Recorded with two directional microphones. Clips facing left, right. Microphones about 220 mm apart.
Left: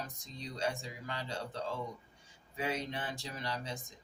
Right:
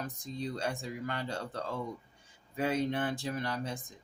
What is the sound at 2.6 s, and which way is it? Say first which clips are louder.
Speech: right 7 dB; 55° right (ahead or behind).